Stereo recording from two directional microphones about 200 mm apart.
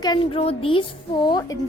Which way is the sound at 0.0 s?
25° left (ahead or behind).